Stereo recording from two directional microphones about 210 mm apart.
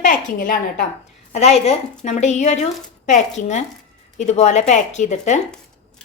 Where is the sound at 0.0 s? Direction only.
40° left (ahead or behind).